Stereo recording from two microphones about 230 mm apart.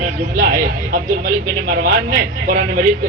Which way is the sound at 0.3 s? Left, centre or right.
Right.